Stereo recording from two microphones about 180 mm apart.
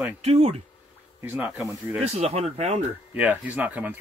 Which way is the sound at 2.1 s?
35° right (ahead or behind).